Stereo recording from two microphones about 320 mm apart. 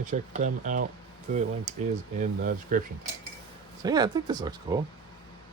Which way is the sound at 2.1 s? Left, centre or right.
Right.